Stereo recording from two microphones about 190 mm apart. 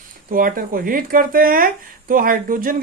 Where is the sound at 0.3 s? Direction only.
45° right (ahead or behind).